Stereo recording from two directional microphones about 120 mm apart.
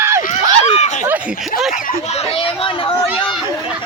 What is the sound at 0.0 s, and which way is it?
Run, 20° right (ahead or behind).